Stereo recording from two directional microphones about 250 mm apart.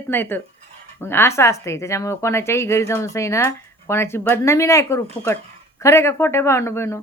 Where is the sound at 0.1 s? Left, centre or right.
Centre.